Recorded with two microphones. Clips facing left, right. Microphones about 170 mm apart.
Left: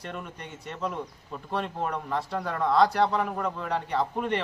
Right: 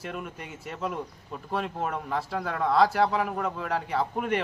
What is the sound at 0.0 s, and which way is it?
A man's voice, 5° right (ahead or behind).